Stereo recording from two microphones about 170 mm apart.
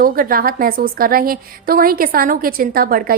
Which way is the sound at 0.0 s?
60° right (ahead or behind).